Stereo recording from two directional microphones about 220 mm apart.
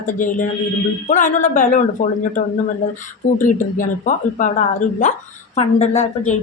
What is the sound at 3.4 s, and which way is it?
A woman's voice, 35° left (ahead or behind).